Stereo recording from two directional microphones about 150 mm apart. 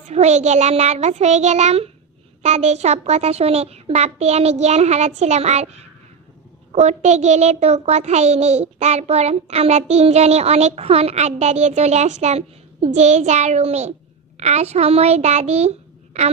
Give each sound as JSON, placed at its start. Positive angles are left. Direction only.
{"t": 0.0, "sound": "a child's voice", "side_deg": -45}